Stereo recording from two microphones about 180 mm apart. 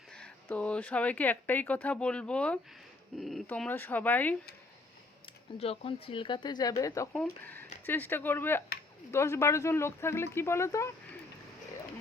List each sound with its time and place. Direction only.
0.1 s speech: 5° left (ahead or behind)
5.5 s speech: 35° left (ahead or behind); by 11.2 s 15° left (ahead or behind)